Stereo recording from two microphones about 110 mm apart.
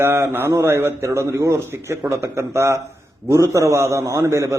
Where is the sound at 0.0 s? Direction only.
25° right (ahead or behind).